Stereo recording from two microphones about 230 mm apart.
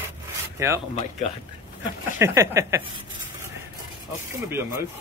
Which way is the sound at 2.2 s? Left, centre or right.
Centre.